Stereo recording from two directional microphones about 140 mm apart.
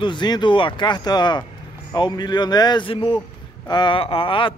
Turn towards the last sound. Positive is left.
turn(degrees=40)  # may be behind; listen again after turning